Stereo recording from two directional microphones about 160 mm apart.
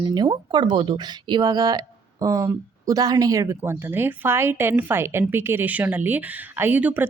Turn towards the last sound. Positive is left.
turn(degrees=-10)  # may be behind; listen again after turning